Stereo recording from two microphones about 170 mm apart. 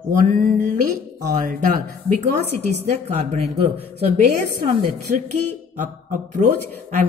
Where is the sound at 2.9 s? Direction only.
40° right (ahead or behind).